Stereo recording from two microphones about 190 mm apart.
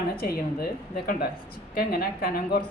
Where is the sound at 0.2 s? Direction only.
50° left (ahead or behind).